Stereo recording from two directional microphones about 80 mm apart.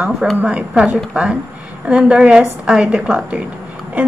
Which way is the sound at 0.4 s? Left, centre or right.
Centre.